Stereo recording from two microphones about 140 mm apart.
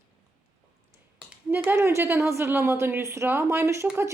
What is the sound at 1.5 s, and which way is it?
A woman's voice, 15° right (ahead or behind).